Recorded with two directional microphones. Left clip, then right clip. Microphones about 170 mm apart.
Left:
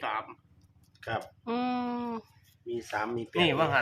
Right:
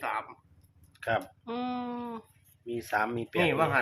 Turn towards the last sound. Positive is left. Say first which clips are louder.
# even
turn(degrees=15)  # may be behind; listen again after turning